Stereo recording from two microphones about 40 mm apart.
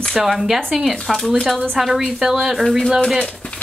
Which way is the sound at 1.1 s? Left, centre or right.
Centre.